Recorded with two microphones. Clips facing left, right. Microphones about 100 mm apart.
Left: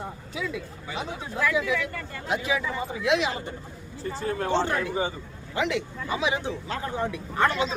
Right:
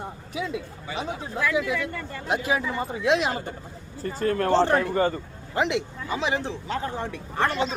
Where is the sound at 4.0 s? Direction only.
55° right (ahead or behind).